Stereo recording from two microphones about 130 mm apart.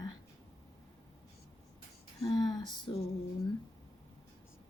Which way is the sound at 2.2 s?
30° left (ahead or behind).